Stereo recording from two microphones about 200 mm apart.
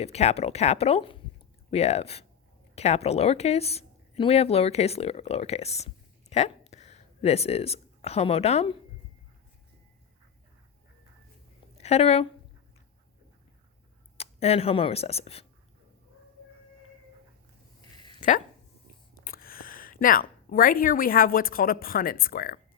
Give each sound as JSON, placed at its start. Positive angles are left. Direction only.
{"t": 0.0, "sound": "a woman's voice", "side_deg": 30}
{"t": 11.8, "sound": "speech", "side_deg": 30}
{"t": 14.2, "sound": "speech", "side_deg": 30}
{"t": 18.2, "sound": "a sound", "side_deg": 40}
{"t": 19.2, "sound": "speech", "side_deg": 45}